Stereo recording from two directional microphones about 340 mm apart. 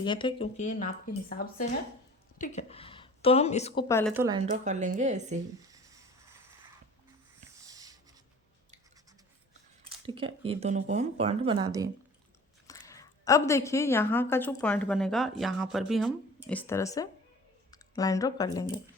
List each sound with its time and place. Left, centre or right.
0.0 s a woman's voice: centre
4.1 s speech: centre
4.6 s a woman's voice: right
5.6 s a sound: centre
7.6 s a sound: centre
10.1 s speech: centre
12.6 s a woman's voice: centre